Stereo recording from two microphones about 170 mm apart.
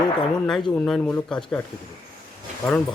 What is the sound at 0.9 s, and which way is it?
Speech, 5° left (ahead or behind).